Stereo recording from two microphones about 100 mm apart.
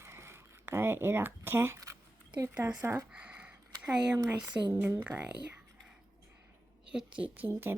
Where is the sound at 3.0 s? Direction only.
10° right (ahead or behind).